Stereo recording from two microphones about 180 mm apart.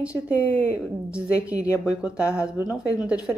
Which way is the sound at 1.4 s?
15° left (ahead or behind).